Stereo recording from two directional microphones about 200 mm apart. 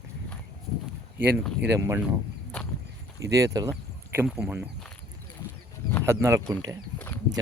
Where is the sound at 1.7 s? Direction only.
15° right (ahead or behind).